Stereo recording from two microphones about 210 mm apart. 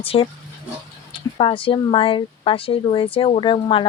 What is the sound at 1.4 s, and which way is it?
Speech, 25° left (ahead or behind).